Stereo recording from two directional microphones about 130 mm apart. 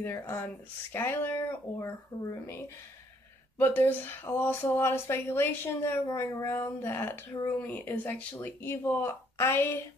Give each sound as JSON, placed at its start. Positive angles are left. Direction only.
{"t": 0.0, "sound": "speech", "side_deg": 20}
{"t": 3.5, "sound": "speech", "side_deg": 15}